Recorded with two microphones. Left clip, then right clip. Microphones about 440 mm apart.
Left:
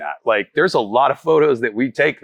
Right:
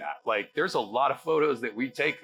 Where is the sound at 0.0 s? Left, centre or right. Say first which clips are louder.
Left 11 dB; left.